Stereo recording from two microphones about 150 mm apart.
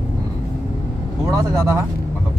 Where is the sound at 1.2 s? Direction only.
20° right (ahead or behind).